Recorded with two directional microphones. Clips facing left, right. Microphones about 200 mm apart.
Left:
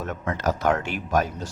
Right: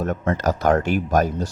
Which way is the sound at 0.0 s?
40° right (ahead or behind).